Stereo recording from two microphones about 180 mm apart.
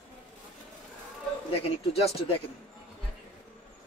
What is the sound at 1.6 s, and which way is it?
Speech, 35° left (ahead or behind).